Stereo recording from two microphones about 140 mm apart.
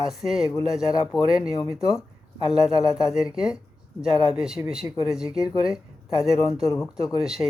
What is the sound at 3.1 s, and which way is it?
Speech, 5° right (ahead or behind).